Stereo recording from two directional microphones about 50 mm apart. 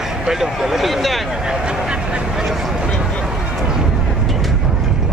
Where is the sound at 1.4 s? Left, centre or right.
Centre.